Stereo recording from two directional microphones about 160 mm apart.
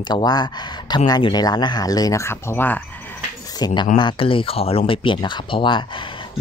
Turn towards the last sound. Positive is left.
turn(degrees=30)  # may be behind; listen again after turning